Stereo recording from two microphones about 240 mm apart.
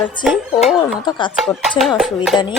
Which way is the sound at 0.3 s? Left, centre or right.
Centre.